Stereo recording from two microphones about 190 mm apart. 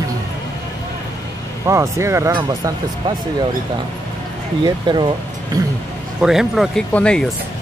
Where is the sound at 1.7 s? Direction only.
15° right (ahead or behind).